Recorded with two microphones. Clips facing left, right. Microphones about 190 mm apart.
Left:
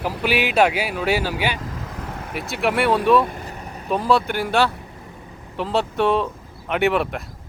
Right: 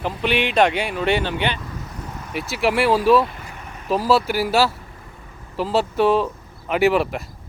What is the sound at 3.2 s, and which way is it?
Vehicle, 40° left (ahead or behind).